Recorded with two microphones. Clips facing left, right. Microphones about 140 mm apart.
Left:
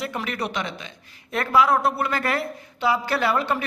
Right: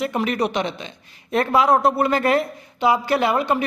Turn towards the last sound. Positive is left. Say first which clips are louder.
# right 4 dB
turn(degrees=-20)  # may be behind; listen again after turning